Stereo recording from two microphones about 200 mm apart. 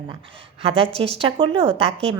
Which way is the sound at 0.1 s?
30° right (ahead or behind).